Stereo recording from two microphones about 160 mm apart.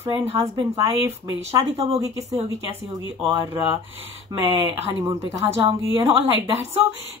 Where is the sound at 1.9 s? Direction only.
20° right (ahead or behind).